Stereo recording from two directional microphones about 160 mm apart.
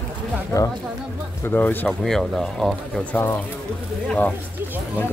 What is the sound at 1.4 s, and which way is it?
Speech, 10° left (ahead or behind).